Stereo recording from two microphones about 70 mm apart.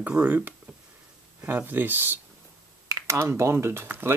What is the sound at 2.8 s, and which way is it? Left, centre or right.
Speech, right.